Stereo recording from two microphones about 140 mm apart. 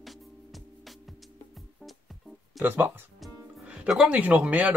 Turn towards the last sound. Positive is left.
turn(degrees=-10)  # may be behind; listen again after turning